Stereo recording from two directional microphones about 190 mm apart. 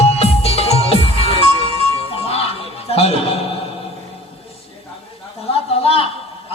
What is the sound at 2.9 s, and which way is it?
Music, 30° left (ahead or behind).